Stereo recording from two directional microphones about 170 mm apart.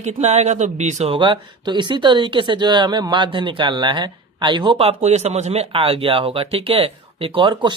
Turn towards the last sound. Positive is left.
turn(degrees=-25)  # may be behind; listen again after turning